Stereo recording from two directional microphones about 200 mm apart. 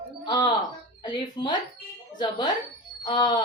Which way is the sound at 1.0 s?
20° left (ahead or behind).